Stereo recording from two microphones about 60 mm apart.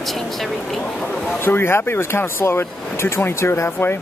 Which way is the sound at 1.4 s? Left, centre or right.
Left.